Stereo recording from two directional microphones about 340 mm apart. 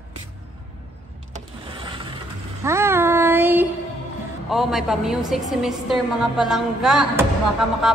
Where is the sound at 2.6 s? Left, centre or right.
Centre.